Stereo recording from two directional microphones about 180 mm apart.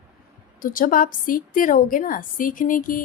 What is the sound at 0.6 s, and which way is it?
A woman's voice, 50° left (ahead or behind).